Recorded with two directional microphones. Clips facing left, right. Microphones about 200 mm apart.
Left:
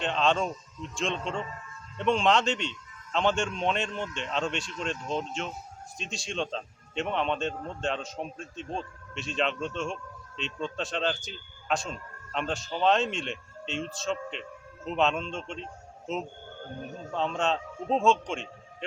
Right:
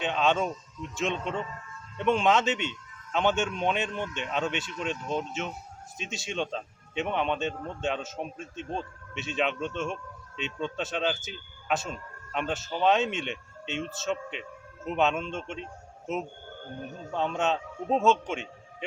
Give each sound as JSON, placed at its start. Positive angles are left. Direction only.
{"t": 0.0, "sound": "a man's voice", "side_deg": -5}
{"t": 17.1, "sound": "a man's voice", "side_deg": -5}